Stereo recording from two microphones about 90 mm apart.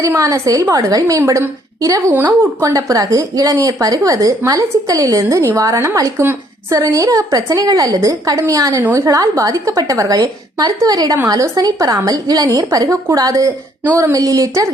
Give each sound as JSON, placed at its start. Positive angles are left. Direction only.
{"t": 0.0, "sound": "a woman's voice", "side_deg": -40}
{"t": 2.1, "sound": "a woman's voice", "side_deg": -20}
{"t": 2.7, "sound": "a woman's voice", "side_deg": -40}